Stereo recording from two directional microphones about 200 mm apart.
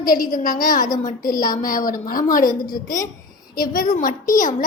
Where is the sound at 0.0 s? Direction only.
45° left (ahead or behind).